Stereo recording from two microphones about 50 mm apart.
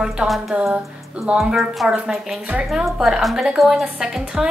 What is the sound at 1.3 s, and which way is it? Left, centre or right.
A woman's voice, right.